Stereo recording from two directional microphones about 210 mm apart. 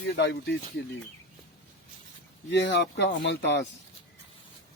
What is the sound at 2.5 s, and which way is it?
Speech, 60° left (ahead or behind).